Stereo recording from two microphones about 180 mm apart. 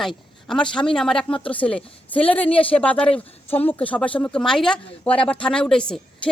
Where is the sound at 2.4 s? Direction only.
30° left (ahead or behind).